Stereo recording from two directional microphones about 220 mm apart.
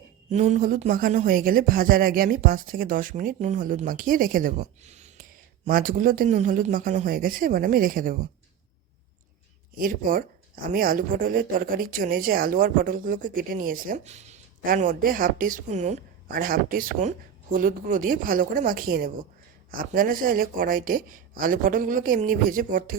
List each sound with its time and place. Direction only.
0.3 s speech: 30° right (ahead or behind)
9.7 s speech: 40° right (ahead or behind)